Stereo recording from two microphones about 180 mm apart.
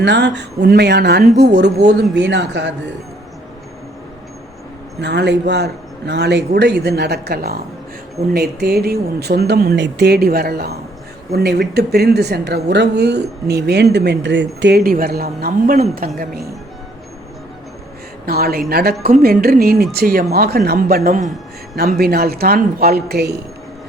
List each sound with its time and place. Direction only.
0.0 s a man's voice: 75° right (ahead or behind)
4.9 s a man's voice: 70° right (ahead or behind)
14.8 s speech: 55° right (ahead or behind)
18.3 s speech: 55° right (ahead or behind)